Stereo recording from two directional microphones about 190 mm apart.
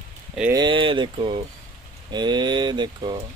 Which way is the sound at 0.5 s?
25° right (ahead or behind).